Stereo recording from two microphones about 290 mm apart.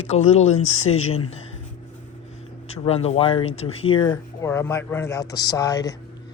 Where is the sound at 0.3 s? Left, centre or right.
Left.